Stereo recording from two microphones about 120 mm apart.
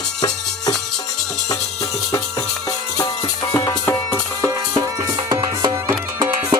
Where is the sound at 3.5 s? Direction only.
25° left (ahead or behind).